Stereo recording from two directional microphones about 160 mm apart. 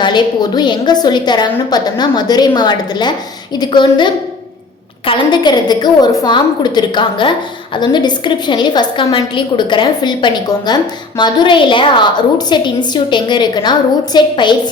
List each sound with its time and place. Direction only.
0.0 s a woman's voice: 30° left (ahead or behind)